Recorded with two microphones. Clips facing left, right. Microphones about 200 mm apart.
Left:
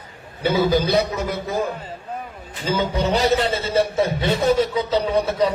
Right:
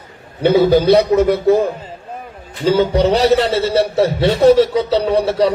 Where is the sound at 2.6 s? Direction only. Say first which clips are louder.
Right 8 dB; 65° right (ahead or behind).